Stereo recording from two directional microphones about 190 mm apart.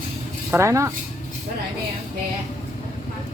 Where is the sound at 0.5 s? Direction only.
15° right (ahead or behind).